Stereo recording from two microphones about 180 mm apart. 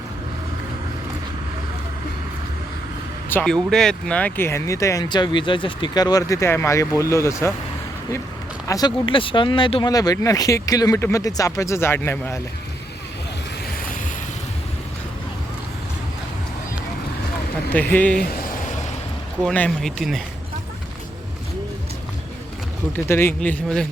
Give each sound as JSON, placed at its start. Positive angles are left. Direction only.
{"t": 3.3, "sound": "speech", "side_deg": 5}
{"t": 8.6, "sound": "speech", "side_deg": 20}
{"t": 17.7, "sound": "speech", "side_deg": 10}
{"t": 18.2, "sound": "speech", "side_deg": 55}
{"t": 19.4, "sound": "speech", "side_deg": 5}
{"t": 22.9, "sound": "speech", "side_deg": 10}